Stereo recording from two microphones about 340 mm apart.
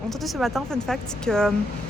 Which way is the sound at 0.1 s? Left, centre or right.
Centre.